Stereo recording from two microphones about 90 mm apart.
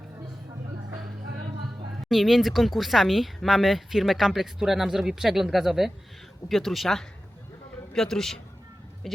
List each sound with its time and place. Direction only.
2.0 s speech: centre (ahead or behind)